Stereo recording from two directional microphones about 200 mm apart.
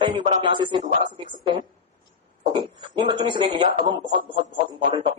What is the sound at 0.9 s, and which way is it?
Speech, 35° right (ahead or behind).